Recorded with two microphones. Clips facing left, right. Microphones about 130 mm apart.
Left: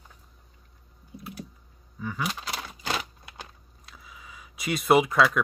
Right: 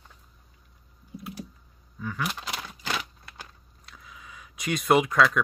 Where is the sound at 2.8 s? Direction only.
25° left (ahead or behind).